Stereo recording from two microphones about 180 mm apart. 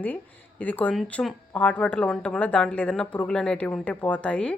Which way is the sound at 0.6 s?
10° left (ahead or behind).